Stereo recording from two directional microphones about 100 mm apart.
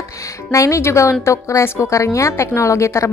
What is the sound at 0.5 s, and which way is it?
A woman's voice, 30° left (ahead or behind).